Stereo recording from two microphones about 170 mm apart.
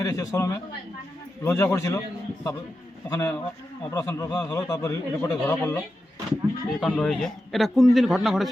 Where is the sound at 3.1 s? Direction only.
20° left (ahead or behind).